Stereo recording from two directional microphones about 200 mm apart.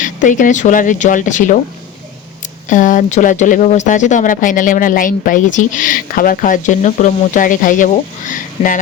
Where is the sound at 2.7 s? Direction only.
40° left (ahead or behind).